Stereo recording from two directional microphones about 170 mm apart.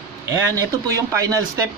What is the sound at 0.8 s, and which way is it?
Speech, 20° right (ahead or behind).